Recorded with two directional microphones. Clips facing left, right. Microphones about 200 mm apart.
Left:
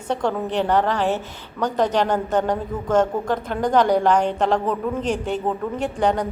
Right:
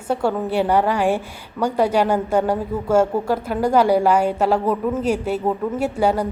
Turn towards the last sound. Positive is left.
turn(degrees=-5)  # may be behind; listen again after turning